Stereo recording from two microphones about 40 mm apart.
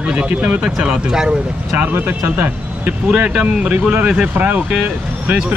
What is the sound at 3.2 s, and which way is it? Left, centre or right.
Speech, right.